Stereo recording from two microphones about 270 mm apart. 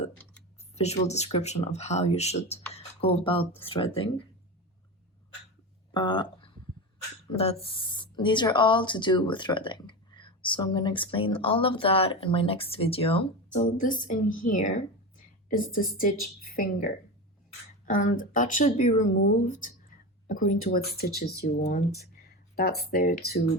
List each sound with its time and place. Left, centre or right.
0.8 s speech: left
5.9 s a woman's voice: centre; by 23.4 s left